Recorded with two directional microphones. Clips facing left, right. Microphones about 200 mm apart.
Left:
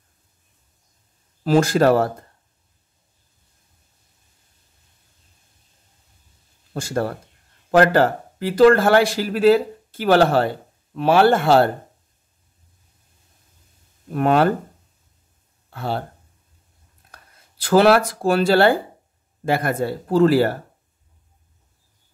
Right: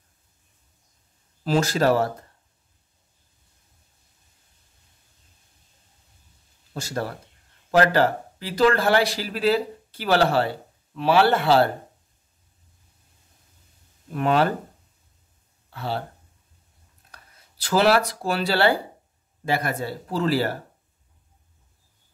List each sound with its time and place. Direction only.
1.4 s speech: 55° left (ahead or behind)
6.7 s speech: 50° left (ahead or behind)
14.1 s speech: 50° left (ahead or behind)
15.7 s speech: 50° left (ahead or behind)
17.1 s speech: 50° left (ahead or behind)